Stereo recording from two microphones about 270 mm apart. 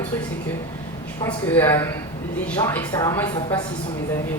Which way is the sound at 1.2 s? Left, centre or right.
Centre.